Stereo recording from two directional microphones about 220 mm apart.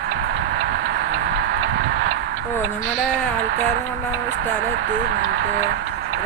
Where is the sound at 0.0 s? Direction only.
50° right (ahead or behind).